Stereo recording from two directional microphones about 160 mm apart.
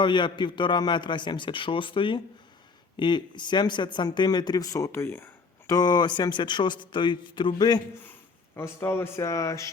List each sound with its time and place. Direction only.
0.0 s speech: 30° left (ahead or behind)
8.5 s speech: 15° left (ahead or behind)